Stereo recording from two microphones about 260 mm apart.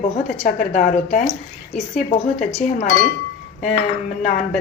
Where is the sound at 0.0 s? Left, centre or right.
Left.